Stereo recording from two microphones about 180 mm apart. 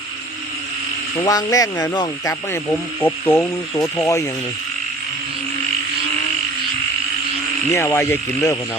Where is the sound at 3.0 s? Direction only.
10° left (ahead or behind).